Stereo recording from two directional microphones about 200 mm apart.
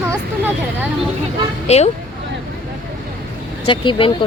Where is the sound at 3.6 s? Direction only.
25° left (ahead or behind).